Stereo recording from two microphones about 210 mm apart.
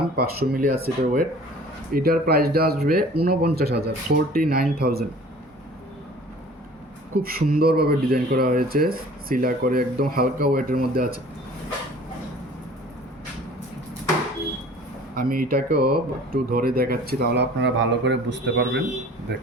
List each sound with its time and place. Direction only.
0.2 s speech: 45° right (ahead or behind)
7.2 s speech: 45° right (ahead or behind)
15.1 s speech: 45° right (ahead or behind)
19.3 s wind chime: 50° right (ahead or behind)